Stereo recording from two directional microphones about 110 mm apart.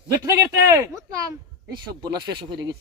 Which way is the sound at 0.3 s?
25° right (ahead or behind).